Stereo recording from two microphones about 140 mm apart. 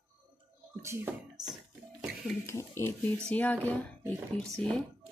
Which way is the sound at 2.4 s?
20° left (ahead or behind).